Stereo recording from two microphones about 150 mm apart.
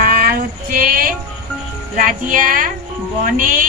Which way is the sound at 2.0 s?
65° right (ahead or behind).